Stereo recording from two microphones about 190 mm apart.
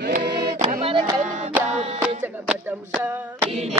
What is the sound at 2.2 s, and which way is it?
Music, 10° right (ahead or behind).